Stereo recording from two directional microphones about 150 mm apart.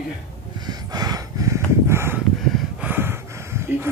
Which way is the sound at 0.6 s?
25° right (ahead or behind).